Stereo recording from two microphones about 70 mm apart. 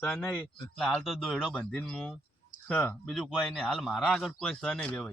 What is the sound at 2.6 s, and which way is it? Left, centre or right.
Speech, left.